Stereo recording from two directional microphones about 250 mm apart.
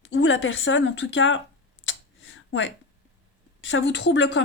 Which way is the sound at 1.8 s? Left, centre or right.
Left.